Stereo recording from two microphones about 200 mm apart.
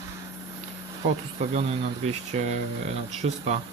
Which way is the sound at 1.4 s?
35° right (ahead or behind).